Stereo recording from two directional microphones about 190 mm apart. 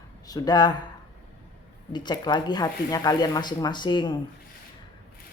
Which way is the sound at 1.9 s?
25° left (ahead or behind).